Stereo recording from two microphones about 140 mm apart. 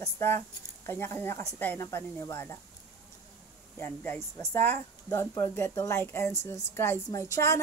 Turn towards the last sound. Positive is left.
turn(degrees=20)  # may be behind; listen again after turning